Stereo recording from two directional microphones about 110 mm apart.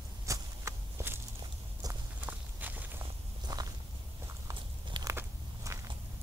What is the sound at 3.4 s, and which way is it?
Walk, 35° right (ahead or behind).